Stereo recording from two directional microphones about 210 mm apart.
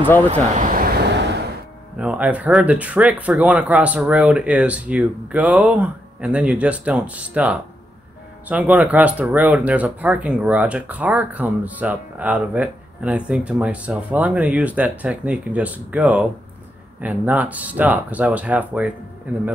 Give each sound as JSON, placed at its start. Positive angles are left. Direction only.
{"t": 0.3, "sound": "speech", "side_deg": -40}
{"t": 2.0, "sound": "speech", "side_deg": -5}